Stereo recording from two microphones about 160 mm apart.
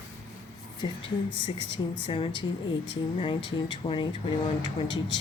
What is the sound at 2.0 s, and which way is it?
Speech, 30° left (ahead or behind).